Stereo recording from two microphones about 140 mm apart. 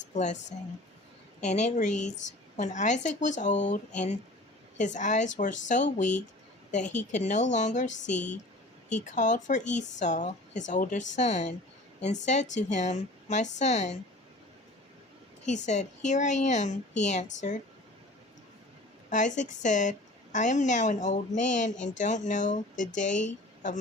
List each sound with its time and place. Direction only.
0.1 s speech: 60° left (ahead or behind)
1.4 s a woman's voice: 55° left (ahead or behind)
15.4 s a woman's voice: 55° left (ahead or behind)
19.1 s a woman's voice: 60° left (ahead or behind)